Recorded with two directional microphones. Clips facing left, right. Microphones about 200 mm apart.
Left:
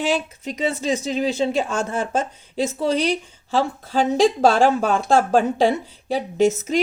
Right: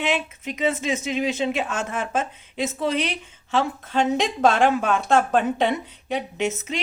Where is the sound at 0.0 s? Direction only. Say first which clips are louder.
Left 3 dB; 35° left (ahead or behind).